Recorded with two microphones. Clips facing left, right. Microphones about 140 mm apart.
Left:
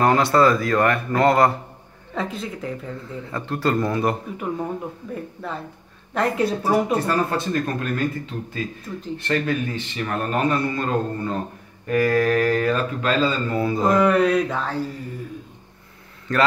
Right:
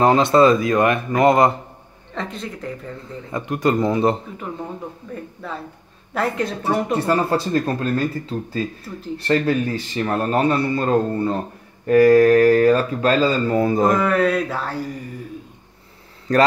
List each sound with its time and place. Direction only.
0.0 s a man's voice: 20° right (ahead or behind)
2.1 s mantra: centre (ahead or behind)
3.3 s a man's voice: 15° right (ahead or behind)
5.4 s mantra: centre (ahead or behind)
7.0 s speech: 30° right (ahead or behind); by 13.9 s 45° right (ahead or behind)
13.9 s mantra: centre (ahead or behind)
16.3 s speech: 35° right (ahead or behind)